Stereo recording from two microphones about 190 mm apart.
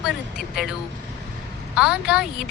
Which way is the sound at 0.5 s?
Centre (ahead or behind).